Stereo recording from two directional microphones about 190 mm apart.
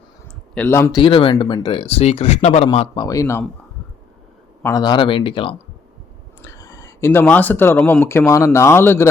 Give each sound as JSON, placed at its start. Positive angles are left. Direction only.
{"t": 0.5, "sound": "a man's voice", "side_deg": 10}
{"t": 1.0, "sound": "speech", "side_deg": 30}
{"t": 4.6, "sound": "a man's voice", "side_deg": 20}